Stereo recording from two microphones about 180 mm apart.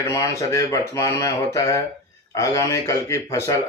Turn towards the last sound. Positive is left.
turn(degrees=15)  # may be behind; listen again after turning